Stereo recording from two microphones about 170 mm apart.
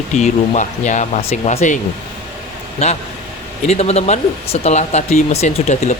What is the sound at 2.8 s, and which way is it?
Speech, 40° left (ahead or behind).